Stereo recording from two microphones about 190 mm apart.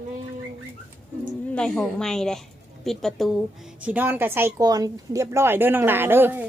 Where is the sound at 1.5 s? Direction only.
5° left (ahead or behind).